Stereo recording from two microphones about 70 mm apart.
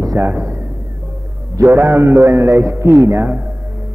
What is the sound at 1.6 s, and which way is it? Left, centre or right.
A man's voice, right.